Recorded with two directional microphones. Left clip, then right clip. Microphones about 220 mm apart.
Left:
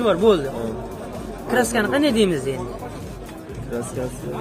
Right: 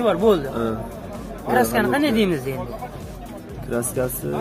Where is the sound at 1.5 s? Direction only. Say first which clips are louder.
Right 1 dB; centre (ahead or behind).